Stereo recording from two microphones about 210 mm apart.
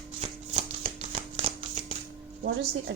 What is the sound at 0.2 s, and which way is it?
Shuffling cards, 30° right (ahead or behind).